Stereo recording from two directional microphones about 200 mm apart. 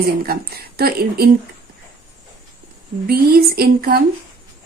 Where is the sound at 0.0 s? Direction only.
50° right (ahead or behind).